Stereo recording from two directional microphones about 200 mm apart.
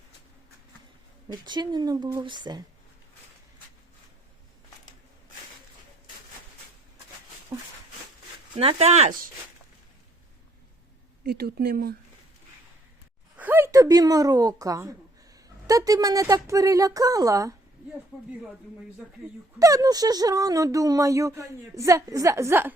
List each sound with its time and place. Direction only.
1.3 s speech: 20° right (ahead or behind)
8.5 s speech: 30° right (ahead or behind)
11.2 s speech: 50° right (ahead or behind)
13.3 s speech: 10° right (ahead or behind)
19.5 s speech: 15° right (ahead or behind)